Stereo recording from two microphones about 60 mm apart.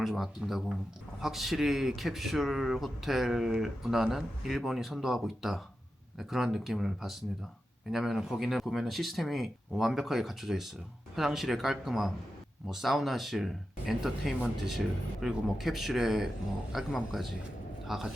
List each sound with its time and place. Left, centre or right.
0.0 s a man's voice: centre